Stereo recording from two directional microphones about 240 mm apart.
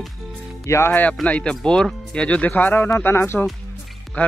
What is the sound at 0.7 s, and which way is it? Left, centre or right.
Speech, centre.